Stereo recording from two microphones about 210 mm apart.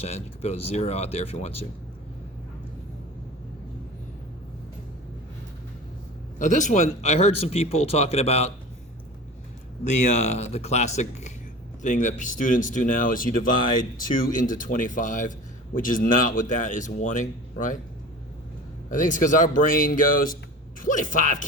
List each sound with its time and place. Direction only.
0.0 s speech: 30° left (ahead or behind)
6.4 s a man's voice: 35° left (ahead or behind)
9.8 s a man's voice: 35° left (ahead or behind)
18.9 s a man's voice: 40° left (ahead or behind)